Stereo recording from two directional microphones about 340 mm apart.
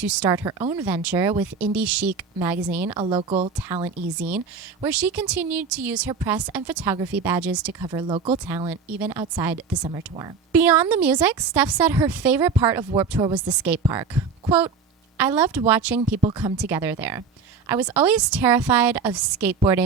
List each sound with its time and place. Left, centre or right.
0.0 s a woman's voice: centre
10.5 s a woman's voice: centre
16.0 s a woman's voice: centre